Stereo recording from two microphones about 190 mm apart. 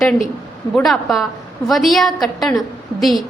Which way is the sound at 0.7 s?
Centre (ahead or behind).